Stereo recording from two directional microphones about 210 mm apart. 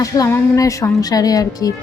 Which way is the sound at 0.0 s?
15° left (ahead or behind).